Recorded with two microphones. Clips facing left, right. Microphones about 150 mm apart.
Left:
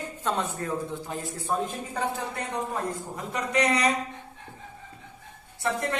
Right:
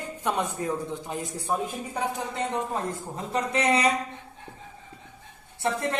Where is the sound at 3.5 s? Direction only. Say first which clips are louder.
Even; 30° right (ahead or behind).